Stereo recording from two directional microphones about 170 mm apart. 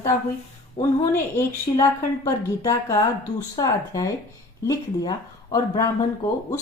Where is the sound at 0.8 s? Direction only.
15° left (ahead or behind).